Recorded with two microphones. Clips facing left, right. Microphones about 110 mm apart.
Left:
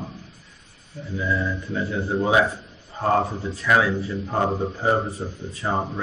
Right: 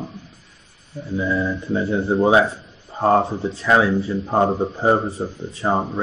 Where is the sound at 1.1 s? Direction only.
30° right (ahead or behind).